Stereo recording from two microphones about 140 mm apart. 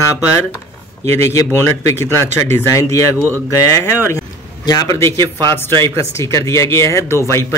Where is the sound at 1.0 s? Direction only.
25° left (ahead or behind).